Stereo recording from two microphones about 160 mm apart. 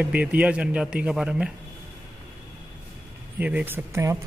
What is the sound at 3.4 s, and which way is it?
Speech, 10° right (ahead or behind).